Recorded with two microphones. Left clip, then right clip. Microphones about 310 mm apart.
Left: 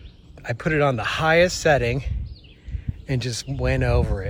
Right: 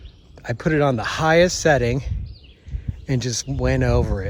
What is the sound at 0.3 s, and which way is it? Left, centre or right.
Speech, centre.